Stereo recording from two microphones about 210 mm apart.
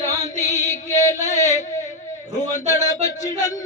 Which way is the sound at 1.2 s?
35° left (ahead or behind).